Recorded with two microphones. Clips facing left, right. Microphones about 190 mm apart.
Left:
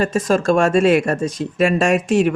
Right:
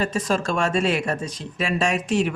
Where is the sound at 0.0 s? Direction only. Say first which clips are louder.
Left 6 dB; 50° left (ahead or behind).